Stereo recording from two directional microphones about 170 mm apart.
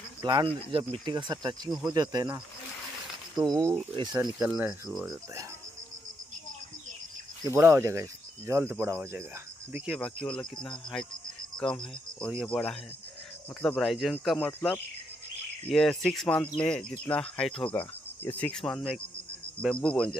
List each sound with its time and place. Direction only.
0.2 s speech: 25° right (ahead or behind)
3.5 s speech: 20° right (ahead or behind)
7.5 s speech: 15° right (ahead or behind)
9.7 s cricket: 5° right (ahead or behind)
15.7 s cricket: centre (ahead or behind)